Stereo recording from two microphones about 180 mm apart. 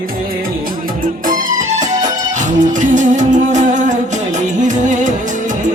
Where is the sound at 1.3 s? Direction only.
45° right (ahead or behind).